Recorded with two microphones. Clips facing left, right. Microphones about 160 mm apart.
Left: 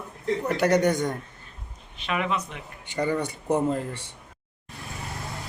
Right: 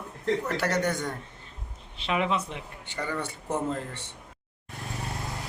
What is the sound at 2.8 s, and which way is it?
A man's voice, 15° left (ahead or behind).